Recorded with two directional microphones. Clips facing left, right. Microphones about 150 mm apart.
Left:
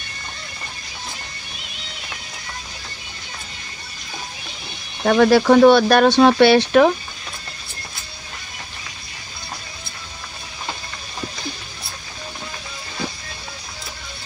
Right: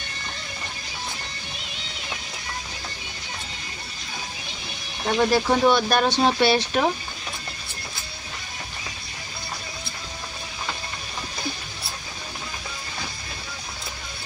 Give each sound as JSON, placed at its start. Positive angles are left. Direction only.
{"t": 5.0, "sound": "speech", "side_deg": 85}